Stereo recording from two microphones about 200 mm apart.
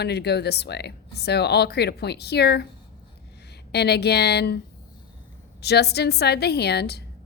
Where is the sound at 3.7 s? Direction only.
55° left (ahead or behind).